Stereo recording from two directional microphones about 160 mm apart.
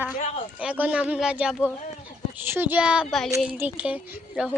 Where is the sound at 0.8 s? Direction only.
10° right (ahead or behind).